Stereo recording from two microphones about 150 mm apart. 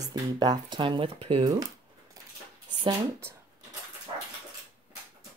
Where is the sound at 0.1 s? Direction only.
25° right (ahead or behind).